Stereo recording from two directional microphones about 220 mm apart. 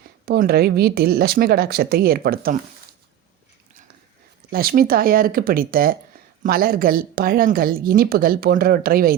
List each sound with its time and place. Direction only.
0.3 s speech: 45° right (ahead or behind)
4.5 s a woman's voice: 40° right (ahead or behind)